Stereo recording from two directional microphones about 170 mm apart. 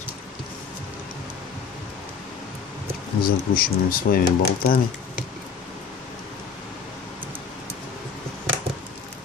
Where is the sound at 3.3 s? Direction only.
60° left (ahead or behind).